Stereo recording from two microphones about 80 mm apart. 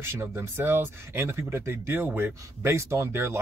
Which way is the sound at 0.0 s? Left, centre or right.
Right.